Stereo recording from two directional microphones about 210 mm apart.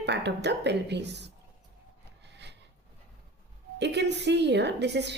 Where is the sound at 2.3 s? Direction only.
55° right (ahead or behind).